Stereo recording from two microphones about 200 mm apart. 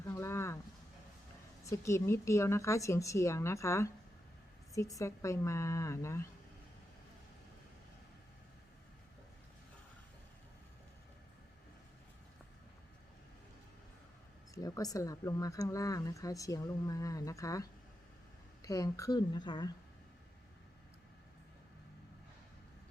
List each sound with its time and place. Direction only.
0.0 s a sound: 15° left (ahead or behind)
1.7 s speech: 15° left (ahead or behind)
14.5 s speech: 15° left (ahead or behind)